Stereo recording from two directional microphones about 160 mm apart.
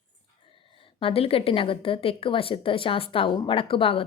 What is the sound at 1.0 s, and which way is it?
Speech, 35° left (ahead or behind).